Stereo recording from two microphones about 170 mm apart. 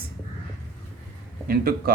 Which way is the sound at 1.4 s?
60° right (ahead or behind).